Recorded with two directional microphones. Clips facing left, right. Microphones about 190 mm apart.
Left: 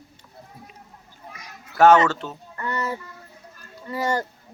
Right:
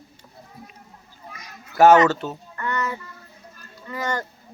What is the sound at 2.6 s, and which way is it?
Speech, 30° left (ahead or behind).